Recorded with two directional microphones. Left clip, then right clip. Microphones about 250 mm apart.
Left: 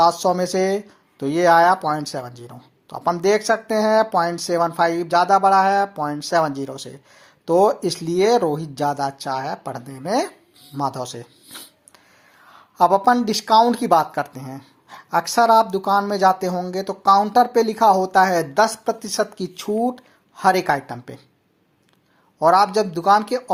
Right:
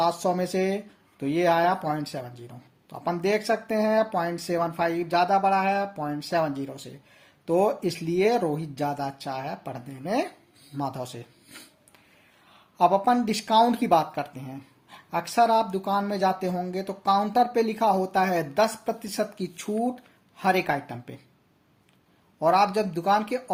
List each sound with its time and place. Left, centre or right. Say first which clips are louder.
0.0 s speech: left 8 dB; centre
22.4 s speech: left 6 dB; centre